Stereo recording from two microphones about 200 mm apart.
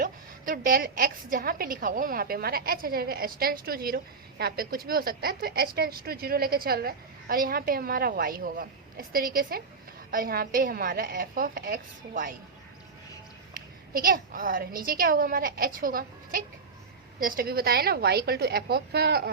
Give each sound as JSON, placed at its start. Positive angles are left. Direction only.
{"t": 0.0, "sound": "a woman's voice", "side_deg": -45}
{"t": 13.9, "sound": "a woman's voice", "side_deg": -45}